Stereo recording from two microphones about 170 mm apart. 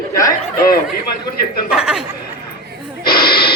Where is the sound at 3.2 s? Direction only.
65° left (ahead or behind).